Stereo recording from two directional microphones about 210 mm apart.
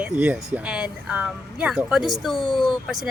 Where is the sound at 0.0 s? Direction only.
5° right (ahead or behind).